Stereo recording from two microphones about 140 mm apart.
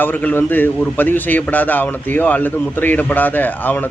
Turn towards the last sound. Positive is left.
turn(degrees=15)  # may be behind; listen again after turning